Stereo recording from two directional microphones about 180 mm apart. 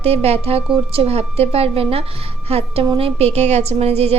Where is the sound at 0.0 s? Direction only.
35° right (ahead or behind).